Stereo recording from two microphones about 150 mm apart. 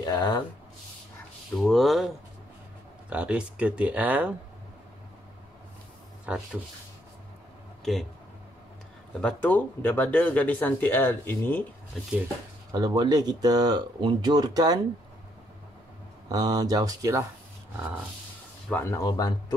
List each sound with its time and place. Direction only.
0.0 s speech: 25° left (ahead or behind)
1.6 s speech: centre (ahead or behind)
6.2 s speech: 5° right (ahead or behind)
7.8 s speech: centre (ahead or behind)
9.2 s speech: 10° left (ahead or behind)
12.7 s speech: 25° right (ahead or behind)
16.3 s speech: 25° right (ahead or behind)
18.7 s speech: 15° left (ahead or behind)